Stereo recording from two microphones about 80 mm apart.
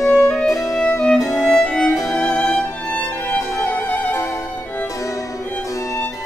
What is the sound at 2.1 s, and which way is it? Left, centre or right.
Music, centre.